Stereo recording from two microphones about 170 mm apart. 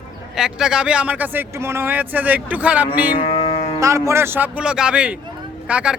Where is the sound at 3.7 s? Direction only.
20° right (ahead or behind).